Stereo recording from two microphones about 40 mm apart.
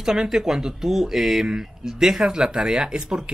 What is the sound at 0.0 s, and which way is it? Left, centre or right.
Speech, centre.